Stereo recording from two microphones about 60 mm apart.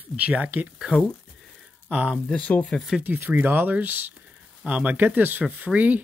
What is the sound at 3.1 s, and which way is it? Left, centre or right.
Speech, right.